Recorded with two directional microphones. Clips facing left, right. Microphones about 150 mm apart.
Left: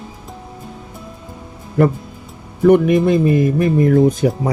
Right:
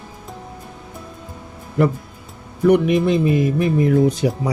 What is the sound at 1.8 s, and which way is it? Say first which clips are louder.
Speech: left 3 dB; 50° left (ahead or behind).